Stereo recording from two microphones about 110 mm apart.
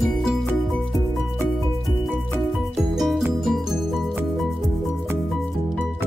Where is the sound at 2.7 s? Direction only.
Centre (ahead or behind).